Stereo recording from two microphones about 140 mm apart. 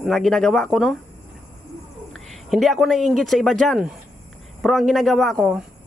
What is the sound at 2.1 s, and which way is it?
Speech, centre (ahead or behind).